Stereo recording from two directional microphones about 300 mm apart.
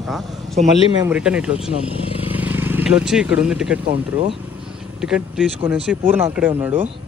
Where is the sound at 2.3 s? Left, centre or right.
Centre.